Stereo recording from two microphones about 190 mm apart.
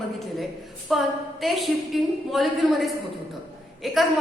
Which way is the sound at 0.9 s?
Centre (ahead or behind).